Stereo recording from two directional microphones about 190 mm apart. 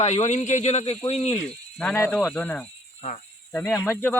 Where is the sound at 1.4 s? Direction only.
5° left (ahead or behind).